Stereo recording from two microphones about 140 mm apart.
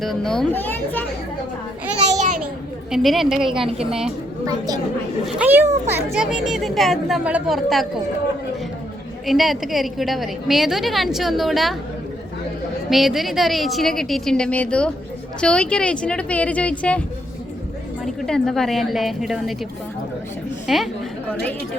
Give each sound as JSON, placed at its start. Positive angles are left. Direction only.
{"t": 0.0, "sound": "a woman's voice", "side_deg": 0}
{"t": 0.5, "sound": "speech", "side_deg": 15}
{"t": 2.0, "sound": "a sound", "side_deg": -55}
{"t": 2.9, "sound": "a woman's voice", "side_deg": 0}
{"t": 4.4, "sound": "a woman's voice", "side_deg": -30}
{"t": 5.2, "sound": "a woman's voice", "side_deg": -10}
{"t": 9.2, "sound": "a woman's voice", "side_deg": 0}
{"t": 12.9, "sound": "a woman's voice", "side_deg": 0}
{"t": 18.0, "sound": "a woman's voice", "side_deg": 5}
{"t": 20.7, "sound": "a woman's voice", "side_deg": 0}